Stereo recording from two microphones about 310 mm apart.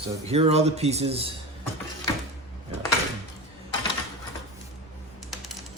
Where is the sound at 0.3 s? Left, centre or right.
Centre.